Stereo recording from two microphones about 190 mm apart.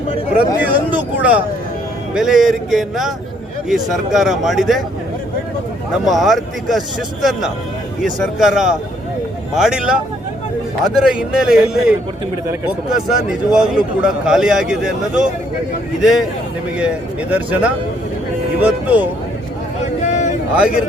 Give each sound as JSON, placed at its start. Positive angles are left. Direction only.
{"t": 0.3, "sound": "a man's voice", "side_deg": -10}
{"t": 6.1, "sound": "a man's voice", "side_deg": 0}
{"t": 11.0, "sound": "a man's voice", "side_deg": -5}
{"t": 19.8, "sound": "a sound", "side_deg": 40}
{"t": 20.6, "sound": "a man's voice", "side_deg": -5}